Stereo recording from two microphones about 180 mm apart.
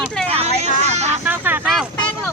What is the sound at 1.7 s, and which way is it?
Vehicle, centre (ahead or behind).